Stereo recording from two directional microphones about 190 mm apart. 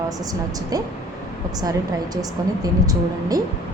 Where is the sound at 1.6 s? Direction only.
20° right (ahead or behind).